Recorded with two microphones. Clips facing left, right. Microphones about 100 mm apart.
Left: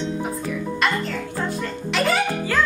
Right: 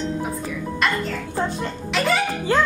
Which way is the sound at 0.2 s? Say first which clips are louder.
Left 1 dB; centre (ahead or behind).